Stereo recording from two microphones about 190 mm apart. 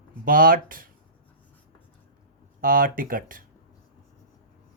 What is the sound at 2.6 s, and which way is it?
Speech, 50° right (ahead or behind).